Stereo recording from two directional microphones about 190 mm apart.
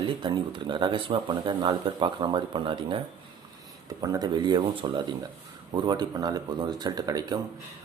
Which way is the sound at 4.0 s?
20° right (ahead or behind).